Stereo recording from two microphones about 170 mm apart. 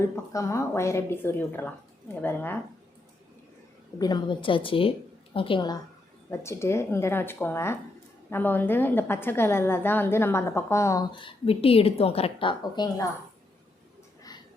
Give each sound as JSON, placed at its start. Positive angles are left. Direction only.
{"t": 0.0, "sound": "a woman's voice", "side_deg": 15}
{"t": 3.9, "sound": "a woman's voice", "side_deg": 25}
{"t": 6.4, "sound": "a woman's voice", "side_deg": 15}